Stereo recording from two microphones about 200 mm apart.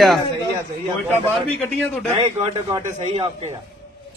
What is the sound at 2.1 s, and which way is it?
A man's voice, 25° right (ahead or behind).